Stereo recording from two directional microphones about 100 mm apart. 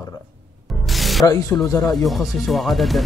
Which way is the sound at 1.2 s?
30° left (ahead or behind).